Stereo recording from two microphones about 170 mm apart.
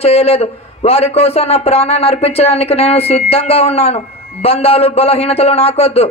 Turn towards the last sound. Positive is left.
turn(degrees=35)  # may be behind; listen again after turning